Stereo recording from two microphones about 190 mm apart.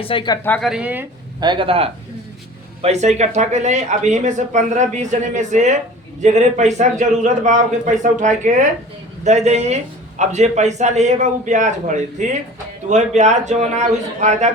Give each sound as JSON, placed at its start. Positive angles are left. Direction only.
{"t": 0.0, "sound": "speech", "side_deg": 25}
{"t": 0.4, "sound": "speech", "side_deg": 5}
{"t": 1.4, "sound": "a man's voice", "side_deg": -25}